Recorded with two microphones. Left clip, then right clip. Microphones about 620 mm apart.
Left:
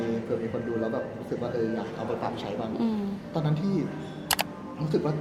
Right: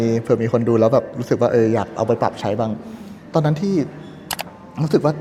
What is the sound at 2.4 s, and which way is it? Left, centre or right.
A man's voice, right.